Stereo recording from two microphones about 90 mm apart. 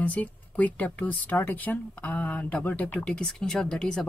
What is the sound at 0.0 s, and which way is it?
Speech, 15° left (ahead or behind).